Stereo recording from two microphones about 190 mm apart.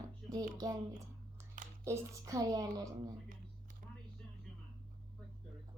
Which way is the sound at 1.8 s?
15° right (ahead or behind).